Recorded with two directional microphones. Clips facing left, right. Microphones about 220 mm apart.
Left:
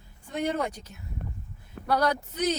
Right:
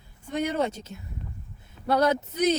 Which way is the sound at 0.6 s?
25° right (ahead or behind).